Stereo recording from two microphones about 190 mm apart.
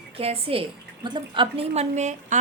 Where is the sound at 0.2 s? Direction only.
30° right (ahead or behind).